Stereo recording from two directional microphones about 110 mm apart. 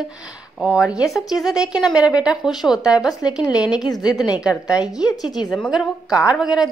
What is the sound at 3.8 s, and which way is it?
Speech, 35° left (ahead or behind).